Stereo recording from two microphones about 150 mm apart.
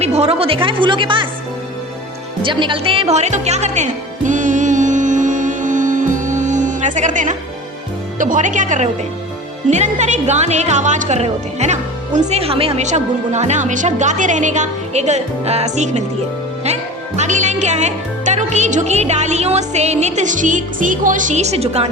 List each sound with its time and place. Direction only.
0.0 s a woman's voice: 45° right (ahead or behind)
2.4 s music: 35° right (ahead or behind); by 7.3 s 55° right (ahead or behind)
8.2 s speech: 60° right (ahead or behind)
17.2 s speech: 55° right (ahead or behind)